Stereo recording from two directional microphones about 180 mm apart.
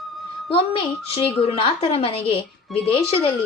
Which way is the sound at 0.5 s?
30° left (ahead or behind).